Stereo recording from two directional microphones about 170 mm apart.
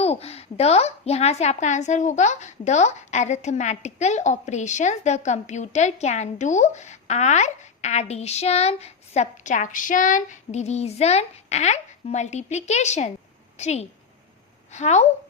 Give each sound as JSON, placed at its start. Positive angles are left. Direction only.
{"t": 0.0, "sound": "a woman's voice", "side_deg": 35}